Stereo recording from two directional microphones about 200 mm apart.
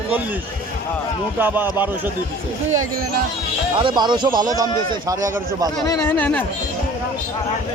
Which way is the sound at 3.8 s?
20° right (ahead or behind).